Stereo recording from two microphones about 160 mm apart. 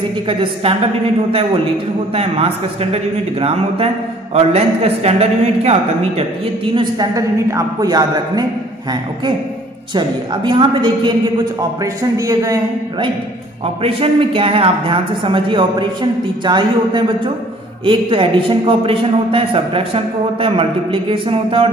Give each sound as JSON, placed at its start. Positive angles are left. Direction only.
{"t": 0.3, "sound": "speech", "side_deg": -35}
{"t": 2.1, "sound": "speech", "side_deg": -35}
{"t": 9.9, "sound": "a woman's voice", "side_deg": -30}
{"t": 13.8, "sound": "speech", "side_deg": -35}